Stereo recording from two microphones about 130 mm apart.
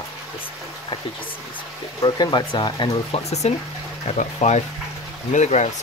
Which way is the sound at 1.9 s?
30° left (ahead or behind).